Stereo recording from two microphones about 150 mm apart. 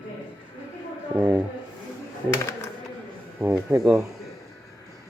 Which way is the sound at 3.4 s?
15° right (ahead or behind).